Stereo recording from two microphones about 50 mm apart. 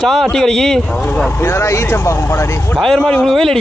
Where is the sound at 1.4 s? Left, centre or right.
Left.